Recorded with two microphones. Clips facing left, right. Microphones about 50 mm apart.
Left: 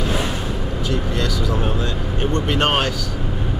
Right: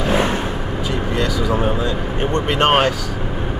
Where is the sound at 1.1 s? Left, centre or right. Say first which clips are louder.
Right 3 dB; right.